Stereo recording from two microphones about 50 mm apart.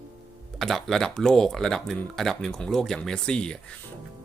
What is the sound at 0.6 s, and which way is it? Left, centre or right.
Speech, centre.